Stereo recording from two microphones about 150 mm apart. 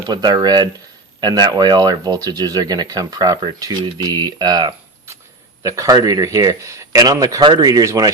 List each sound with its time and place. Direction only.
0.1 s speech: 30° right (ahead or behind)